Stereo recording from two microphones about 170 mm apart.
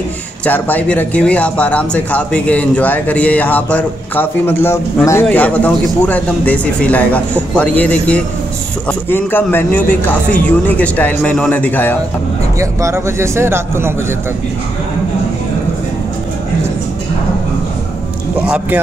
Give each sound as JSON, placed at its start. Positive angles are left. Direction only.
{"t": 0.5, "sound": "speech", "side_deg": 10}
{"t": 12.5, "sound": "speech", "side_deg": -15}
{"t": 18.4, "sound": "a man's voice", "side_deg": -5}